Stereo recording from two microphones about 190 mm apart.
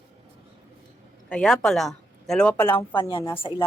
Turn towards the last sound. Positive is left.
turn(degrees=25)  # may be behind; listen again after turning